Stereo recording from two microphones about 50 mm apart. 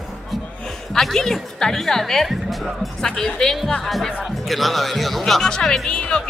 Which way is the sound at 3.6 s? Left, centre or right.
Centre.